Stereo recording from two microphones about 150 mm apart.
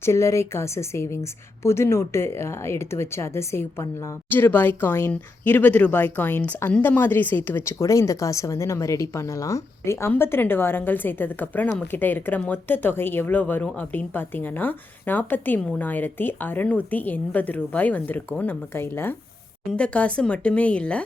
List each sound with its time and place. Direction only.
0.0 s speech: 20° left (ahead or behind)